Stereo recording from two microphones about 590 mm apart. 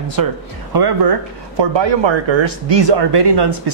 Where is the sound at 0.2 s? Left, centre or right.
Right.